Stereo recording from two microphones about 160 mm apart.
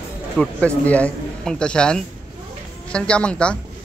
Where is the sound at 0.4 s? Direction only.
5° left (ahead or behind).